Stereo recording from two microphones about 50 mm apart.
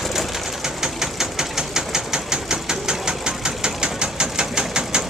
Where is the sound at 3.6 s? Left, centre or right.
Centre.